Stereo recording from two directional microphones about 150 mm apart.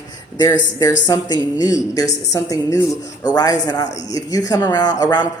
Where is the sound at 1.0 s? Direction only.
25° left (ahead or behind).